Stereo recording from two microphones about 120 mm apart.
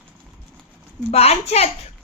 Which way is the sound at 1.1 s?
60° left (ahead or behind).